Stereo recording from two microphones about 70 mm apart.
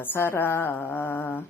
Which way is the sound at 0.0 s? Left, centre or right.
Left.